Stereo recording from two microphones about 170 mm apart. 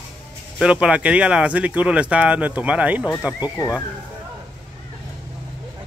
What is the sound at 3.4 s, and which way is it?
Speech, 20° left (ahead or behind).